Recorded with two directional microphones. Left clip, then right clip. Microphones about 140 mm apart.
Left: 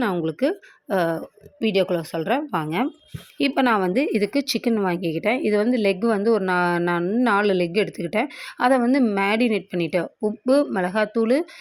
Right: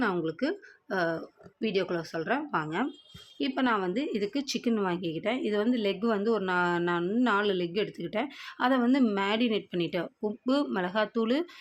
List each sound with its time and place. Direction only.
0.0 s speech: 45° left (ahead or behind)
7.0 s speech: 30° left (ahead or behind)
7.3 s speech: 45° left (ahead or behind)